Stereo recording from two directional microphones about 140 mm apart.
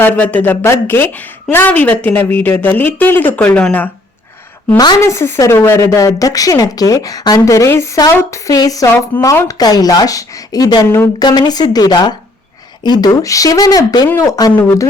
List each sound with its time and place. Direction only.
0.0 s a woman's voice: 10° left (ahead or behind)
4.9 s speech: 20° left (ahead or behind)